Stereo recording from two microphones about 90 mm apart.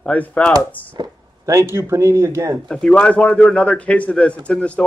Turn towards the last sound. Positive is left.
turn(degrees=15)  # may be behind; listen again after turning